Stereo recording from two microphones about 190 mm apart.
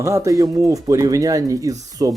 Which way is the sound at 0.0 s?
15° right (ahead or behind).